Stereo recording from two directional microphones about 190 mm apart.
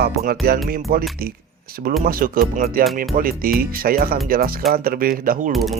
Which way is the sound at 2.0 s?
50° right (ahead or behind).